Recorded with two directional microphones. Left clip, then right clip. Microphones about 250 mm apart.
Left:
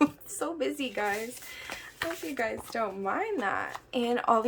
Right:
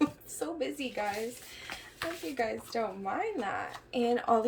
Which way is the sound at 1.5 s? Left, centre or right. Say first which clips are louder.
Left 4 dB; centre.